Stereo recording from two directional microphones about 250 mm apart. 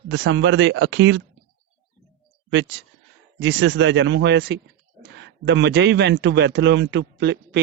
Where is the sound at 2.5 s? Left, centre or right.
Right.